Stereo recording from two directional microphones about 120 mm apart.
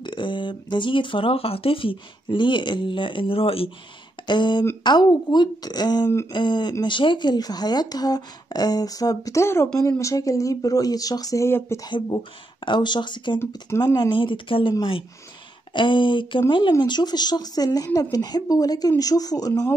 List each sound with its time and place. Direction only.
0.0 s speech: 40° left (ahead or behind)
4.3 s speech: 40° left (ahead or behind); by 11.9 s 25° left (ahead or behind)
11.9 s speech: 40° left (ahead or behind)
13.7 s speech: 20° left (ahead or behind)
13.9 s speech: 40° left (ahead or behind)